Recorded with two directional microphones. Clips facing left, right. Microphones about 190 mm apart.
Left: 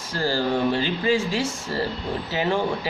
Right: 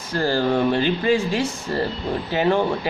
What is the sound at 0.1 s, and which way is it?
Speech, 55° right (ahead or behind).